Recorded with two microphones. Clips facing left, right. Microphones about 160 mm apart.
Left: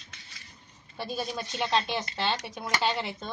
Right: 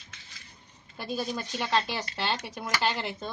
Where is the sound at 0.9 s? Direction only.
Centre (ahead or behind).